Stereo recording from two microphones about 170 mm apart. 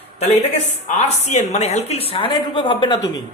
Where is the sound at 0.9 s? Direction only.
40° left (ahead or behind).